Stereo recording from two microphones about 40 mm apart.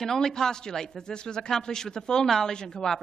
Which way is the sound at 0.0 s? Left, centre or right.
Centre.